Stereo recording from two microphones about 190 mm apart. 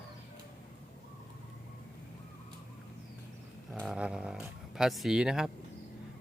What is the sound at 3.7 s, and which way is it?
Speech, 5° right (ahead or behind).